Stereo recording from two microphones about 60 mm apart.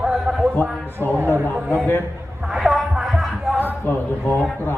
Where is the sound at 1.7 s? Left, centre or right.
Left.